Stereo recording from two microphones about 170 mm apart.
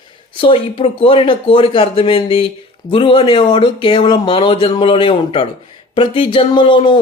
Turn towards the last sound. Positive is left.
turn(degrees=30)  # may be behind; listen again after turning